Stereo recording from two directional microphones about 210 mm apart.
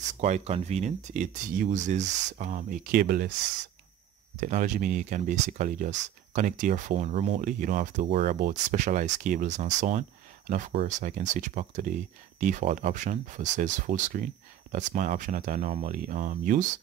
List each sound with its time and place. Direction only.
0.2 s speech: 30° right (ahead or behind)
4.4 s speech: 35° right (ahead or behind)